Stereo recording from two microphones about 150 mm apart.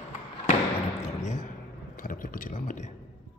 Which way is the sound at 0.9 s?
50° left (ahead or behind).